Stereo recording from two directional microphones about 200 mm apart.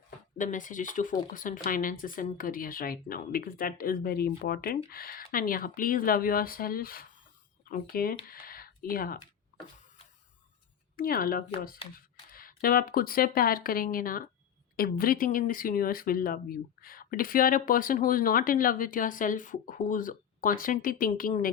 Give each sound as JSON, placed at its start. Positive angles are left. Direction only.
{"t": 0.3, "sound": "speech", "side_deg": 40}
{"t": 8.3, "sound": "a sound", "side_deg": 45}
{"t": 10.9, "sound": "speech", "side_deg": 45}